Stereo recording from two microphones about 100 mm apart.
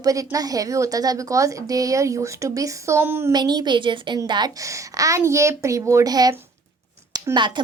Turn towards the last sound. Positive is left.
turn(degrees=-50)  # may be behind; listen again after turning